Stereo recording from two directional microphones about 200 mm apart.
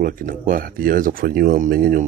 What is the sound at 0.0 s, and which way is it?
Speech, 45° right (ahead or behind).